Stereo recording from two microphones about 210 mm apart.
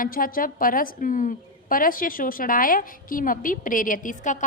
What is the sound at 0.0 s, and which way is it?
A woman's voice, 40° left (ahead or behind).